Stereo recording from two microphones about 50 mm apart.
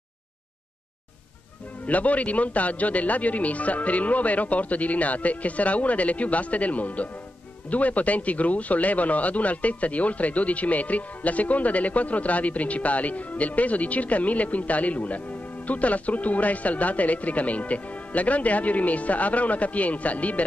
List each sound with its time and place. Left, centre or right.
1.9 s speech: left